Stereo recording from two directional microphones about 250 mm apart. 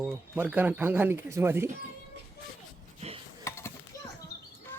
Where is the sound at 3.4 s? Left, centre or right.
Centre.